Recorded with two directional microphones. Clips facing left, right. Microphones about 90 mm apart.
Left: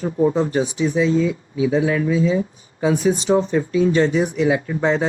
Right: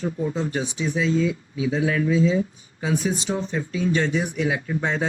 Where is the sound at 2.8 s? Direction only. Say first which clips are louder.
Left 7 dB; 45° left (ahead or behind).